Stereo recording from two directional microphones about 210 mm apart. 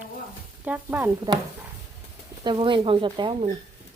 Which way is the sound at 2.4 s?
25° right (ahead or behind).